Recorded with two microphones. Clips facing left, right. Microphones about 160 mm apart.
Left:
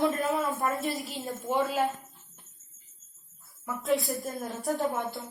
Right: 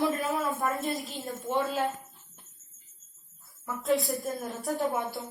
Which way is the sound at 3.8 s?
Centre (ahead or behind).